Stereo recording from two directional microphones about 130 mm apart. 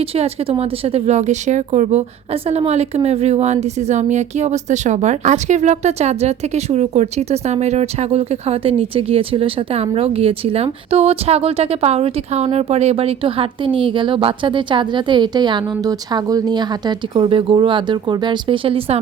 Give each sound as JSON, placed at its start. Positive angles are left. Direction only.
{"t": 0.2, "sound": "a woman's voice", "side_deg": -50}